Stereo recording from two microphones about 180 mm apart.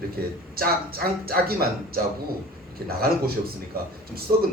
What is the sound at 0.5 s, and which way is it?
Speech, 55° right (ahead or behind).